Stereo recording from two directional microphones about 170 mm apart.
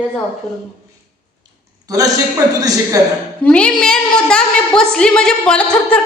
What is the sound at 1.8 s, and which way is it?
Speech, 20° right (ahead or behind).